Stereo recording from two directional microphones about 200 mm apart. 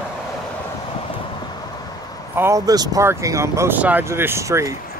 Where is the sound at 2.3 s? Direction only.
15° right (ahead or behind).